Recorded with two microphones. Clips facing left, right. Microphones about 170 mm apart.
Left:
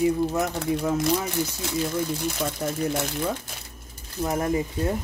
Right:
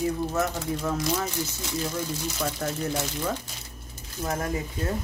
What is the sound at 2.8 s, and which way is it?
Speech, 55° left (ahead or behind).